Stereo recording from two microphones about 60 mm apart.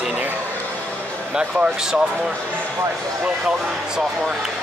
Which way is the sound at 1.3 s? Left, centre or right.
Centre.